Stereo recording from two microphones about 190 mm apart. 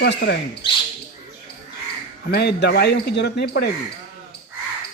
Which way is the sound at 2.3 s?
65° left (ahead or behind).